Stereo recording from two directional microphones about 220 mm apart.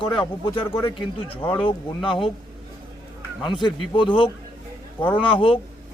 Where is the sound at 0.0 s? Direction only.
20° left (ahead or behind).